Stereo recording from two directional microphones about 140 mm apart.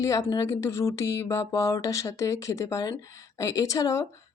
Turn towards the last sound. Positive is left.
turn(degrees=25)  # may be behind; listen again after turning